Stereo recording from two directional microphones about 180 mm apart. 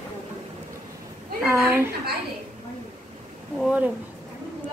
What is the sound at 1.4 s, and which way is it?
Speech, 10° right (ahead or behind).